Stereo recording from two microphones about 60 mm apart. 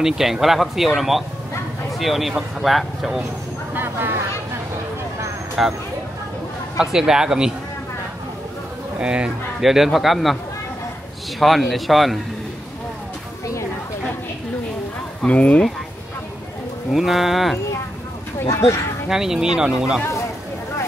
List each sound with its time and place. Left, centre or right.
0.0 s speech: centre
3.7 s a sound: right
5.6 s speech: centre
6.8 s speech: centre
9.0 s speech: centre
9.6 s speech: centre
11.3 s speech: centre
15.2 s speech: left
16.9 s speech: centre
18.5 s speech: left
19.0 s speech: centre